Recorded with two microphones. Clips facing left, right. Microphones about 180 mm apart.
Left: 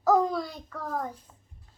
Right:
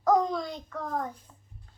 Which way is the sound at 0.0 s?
5° left (ahead or behind).